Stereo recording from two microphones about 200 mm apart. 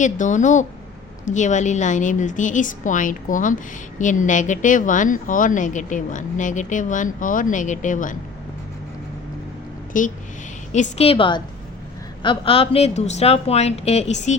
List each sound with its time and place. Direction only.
0.0 s a woman's voice: 40° left (ahead or behind)
9.9 s a woman's voice: 40° left (ahead or behind)
10.9 s a woman's voice: 30° left (ahead or behind)